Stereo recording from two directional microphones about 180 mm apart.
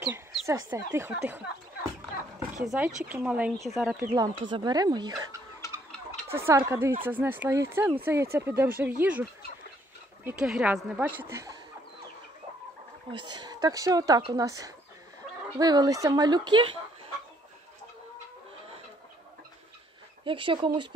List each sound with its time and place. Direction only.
0.0 s chicken: 15° right (ahead or behind)
0.7 s speech: 15° right (ahead or behind)
2.6 s speech: 5° right (ahead or behind)
4.0 s speech: 20° right (ahead or behind)
10.2 s speech: 5° right (ahead or behind)
13.1 s speech: 25° right (ahead or behind)
20.2 s speech: 30° right (ahead or behind)